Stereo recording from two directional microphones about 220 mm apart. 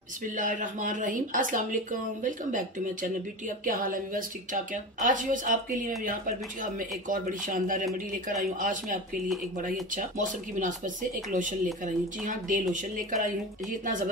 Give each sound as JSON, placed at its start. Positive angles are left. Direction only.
{"t": 0.4, "sound": "speech", "side_deg": -35}